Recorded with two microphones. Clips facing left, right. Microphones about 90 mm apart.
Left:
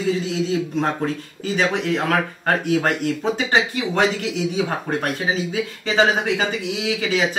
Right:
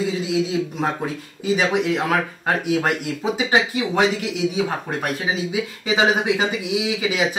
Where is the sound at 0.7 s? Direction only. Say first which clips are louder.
Left 2 dB; 10° right (ahead or behind).